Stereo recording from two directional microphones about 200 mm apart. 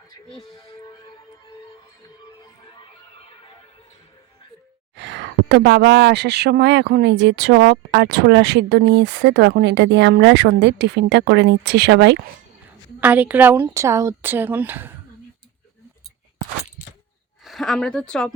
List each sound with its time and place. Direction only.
0.3 s speech: centre (ahead or behind)
4.9 s speech: 60° right (ahead or behind)
13.0 s speech: 5° right (ahead or behind)
17.4 s speech: centre (ahead or behind)